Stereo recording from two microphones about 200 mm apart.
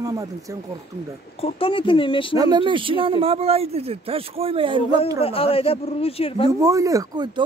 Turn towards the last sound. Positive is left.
turn(degrees=-20)  # may be behind; listen again after turning